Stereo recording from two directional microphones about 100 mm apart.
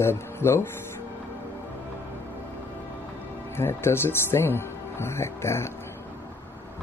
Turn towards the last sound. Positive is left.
turn(degrees=25)  # may be behind; listen again after turning